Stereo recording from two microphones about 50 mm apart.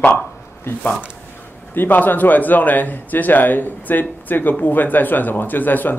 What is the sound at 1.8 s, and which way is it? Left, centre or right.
Speech, left.